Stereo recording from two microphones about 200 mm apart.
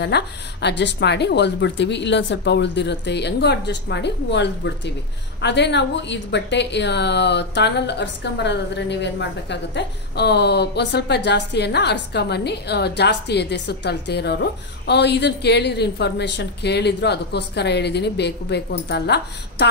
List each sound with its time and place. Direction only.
0.0 s a woman's voice: 55° left (ahead or behind)